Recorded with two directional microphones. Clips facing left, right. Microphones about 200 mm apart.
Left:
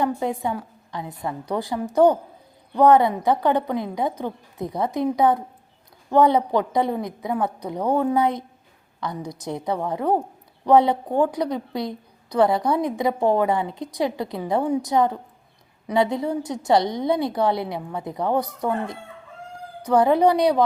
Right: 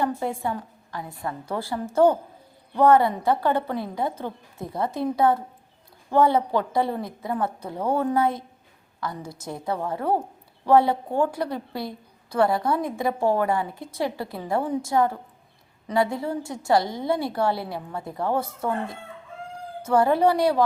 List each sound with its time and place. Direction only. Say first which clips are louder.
0.0 s a woman's voice: left 2 dB; 15° left (ahead or behind)